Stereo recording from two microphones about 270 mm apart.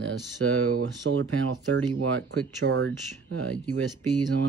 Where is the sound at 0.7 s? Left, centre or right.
Right.